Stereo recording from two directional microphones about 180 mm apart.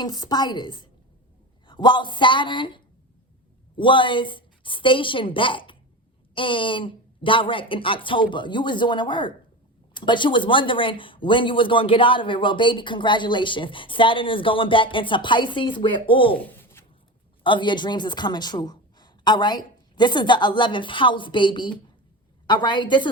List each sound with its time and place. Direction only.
0.0 s speech: 20° left (ahead or behind)
16.4 s writing: 10° left (ahead or behind)
17.4 s speech: 25° left (ahead or behind)